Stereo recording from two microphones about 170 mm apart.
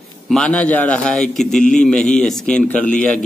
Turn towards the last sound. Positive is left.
turn(degrees=5)  # may be behind; listen again after turning